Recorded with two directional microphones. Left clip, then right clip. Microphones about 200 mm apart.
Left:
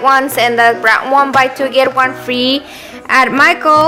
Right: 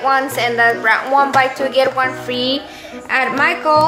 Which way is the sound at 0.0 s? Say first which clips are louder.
Left 5 dB; 35° left (ahead or behind).